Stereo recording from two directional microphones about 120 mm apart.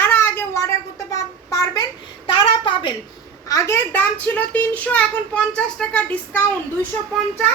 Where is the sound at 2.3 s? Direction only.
50° left (ahead or behind).